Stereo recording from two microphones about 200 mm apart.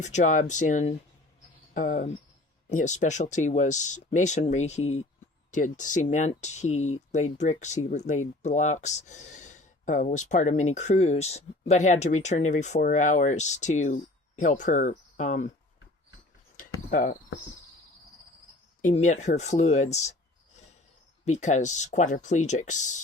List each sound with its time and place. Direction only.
0.0 s speech: 35° left (ahead or behind)
16.6 s cricket: 40° left (ahead or behind)
18.8 s speech: 40° left (ahead or behind)
21.2 s speech: 35° left (ahead or behind)